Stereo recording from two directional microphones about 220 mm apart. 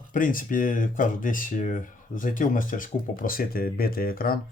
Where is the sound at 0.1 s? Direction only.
40° left (ahead or behind).